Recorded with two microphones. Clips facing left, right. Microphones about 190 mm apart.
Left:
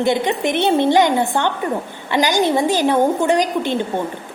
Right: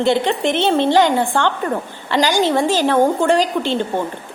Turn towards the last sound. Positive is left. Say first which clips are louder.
# right 1 dB
turn(degrees=15)  # may be behind; listen again after turning